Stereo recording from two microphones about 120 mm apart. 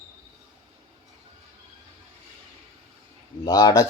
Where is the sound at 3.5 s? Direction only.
30° left (ahead or behind).